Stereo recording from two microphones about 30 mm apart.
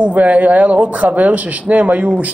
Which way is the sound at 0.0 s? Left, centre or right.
Right.